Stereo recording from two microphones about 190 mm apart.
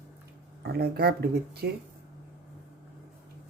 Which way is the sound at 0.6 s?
55° right (ahead or behind).